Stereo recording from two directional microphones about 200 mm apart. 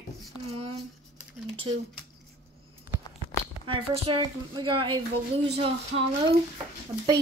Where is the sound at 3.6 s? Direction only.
25° right (ahead or behind).